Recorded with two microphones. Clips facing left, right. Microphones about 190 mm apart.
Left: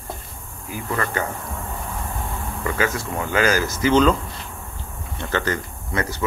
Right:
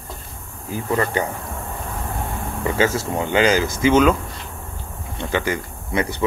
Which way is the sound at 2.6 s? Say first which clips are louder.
Right 4 dB; 25° right (ahead or behind).